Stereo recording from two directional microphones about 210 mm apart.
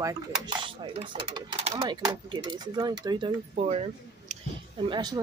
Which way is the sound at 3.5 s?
30° right (ahead or behind).